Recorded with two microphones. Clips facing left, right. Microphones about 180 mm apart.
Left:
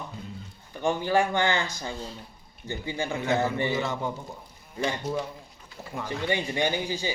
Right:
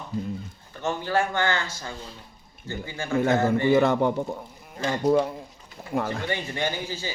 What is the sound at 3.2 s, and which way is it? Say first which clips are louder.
A man's voice: right 6 dB; 50° right (ahead or behind).